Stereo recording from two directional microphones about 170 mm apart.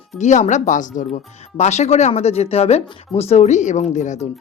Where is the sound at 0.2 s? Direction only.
45° left (ahead or behind).